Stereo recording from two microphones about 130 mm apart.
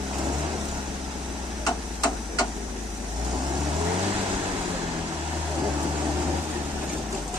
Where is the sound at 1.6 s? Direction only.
30° left (ahead or behind).